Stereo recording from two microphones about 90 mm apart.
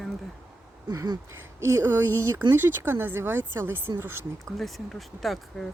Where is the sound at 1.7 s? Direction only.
35° right (ahead or behind).